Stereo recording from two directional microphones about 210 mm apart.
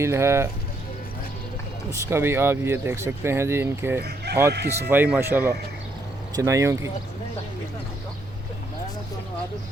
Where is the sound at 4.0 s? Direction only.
50° right (ahead or behind).